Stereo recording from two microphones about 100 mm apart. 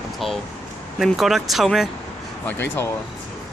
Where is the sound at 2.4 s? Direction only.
20° left (ahead or behind).